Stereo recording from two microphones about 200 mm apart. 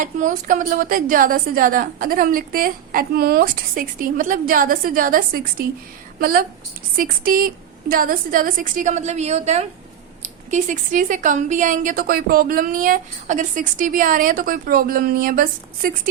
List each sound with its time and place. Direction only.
0.0 s a woman's voice: 40° right (ahead or behind)